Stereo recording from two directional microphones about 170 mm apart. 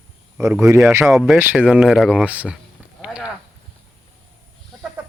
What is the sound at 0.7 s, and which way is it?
Speech, 15° right (ahead or behind).